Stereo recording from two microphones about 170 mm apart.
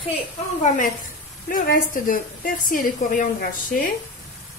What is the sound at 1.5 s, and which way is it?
A woman's voice, 55° left (ahead or behind).